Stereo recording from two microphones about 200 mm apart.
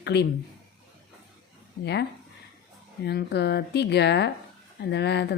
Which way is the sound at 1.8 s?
60° left (ahead or behind).